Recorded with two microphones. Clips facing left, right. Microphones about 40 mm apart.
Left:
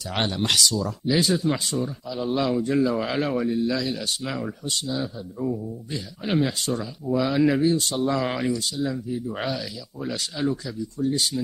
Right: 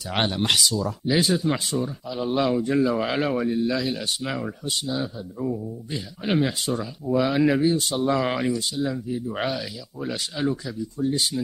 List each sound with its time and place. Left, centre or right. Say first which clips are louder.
0.1 s speech: right 1 dB; centre